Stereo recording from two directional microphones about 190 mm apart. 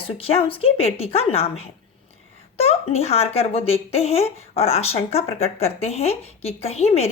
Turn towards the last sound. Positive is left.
turn(degrees=35)  # may be behind; listen again after turning